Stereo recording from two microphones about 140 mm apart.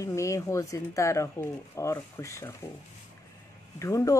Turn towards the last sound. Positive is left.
turn(degrees=20)  # may be behind; listen again after turning